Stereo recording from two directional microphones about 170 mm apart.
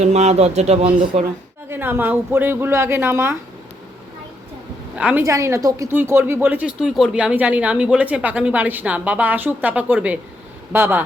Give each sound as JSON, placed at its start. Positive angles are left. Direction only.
{"t": 0.0, "sound": "speech", "side_deg": -40}
{"t": 1.7, "sound": "speech", "side_deg": -15}
{"t": 4.9, "sound": "speech", "side_deg": -5}
{"t": 5.2, "sound": "speech", "side_deg": -20}